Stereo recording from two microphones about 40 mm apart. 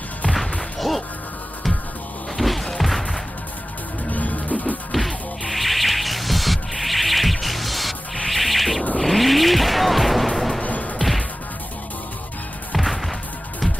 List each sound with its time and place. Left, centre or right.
0.7 s music: centre
2.3 s music: centre
4.1 s music: left
4.9 s music: centre
10.6 s music: left
11.0 s whack: centre
12.7 s music: centre